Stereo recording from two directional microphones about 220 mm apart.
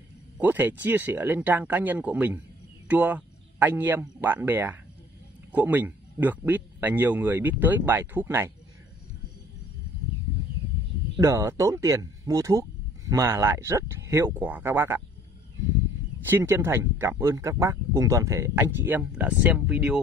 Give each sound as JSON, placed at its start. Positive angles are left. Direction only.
{"t": 0.4, "sound": "speech", "side_deg": -10}
{"t": 11.1, "sound": "speech", "side_deg": -15}
{"t": 16.3, "sound": "speech", "side_deg": -10}